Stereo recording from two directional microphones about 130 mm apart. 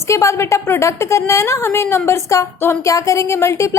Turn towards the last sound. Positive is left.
turn(degrees=20)  # may be behind; listen again after turning